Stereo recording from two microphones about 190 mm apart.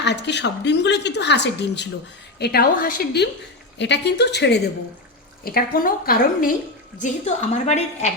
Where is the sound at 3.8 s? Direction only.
65° left (ahead or behind).